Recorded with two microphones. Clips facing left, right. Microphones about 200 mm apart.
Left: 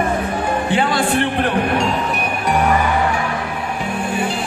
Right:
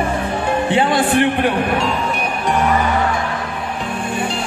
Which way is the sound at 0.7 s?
25° right (ahead or behind).